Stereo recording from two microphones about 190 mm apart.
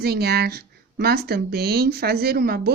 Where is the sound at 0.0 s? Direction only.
55° right (ahead or behind).